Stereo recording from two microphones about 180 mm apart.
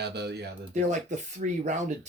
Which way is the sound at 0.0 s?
65° right (ahead or behind).